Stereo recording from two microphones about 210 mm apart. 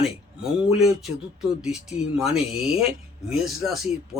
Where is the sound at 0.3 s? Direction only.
5° right (ahead or behind).